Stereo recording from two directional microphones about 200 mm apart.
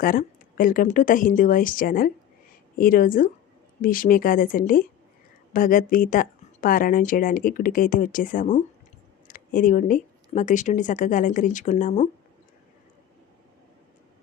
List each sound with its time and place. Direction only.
0.0 s speech: 45° left (ahead or behind)